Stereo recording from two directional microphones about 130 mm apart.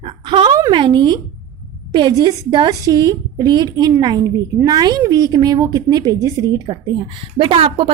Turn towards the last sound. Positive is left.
turn(degrees=-40)  # may be behind; listen again after turning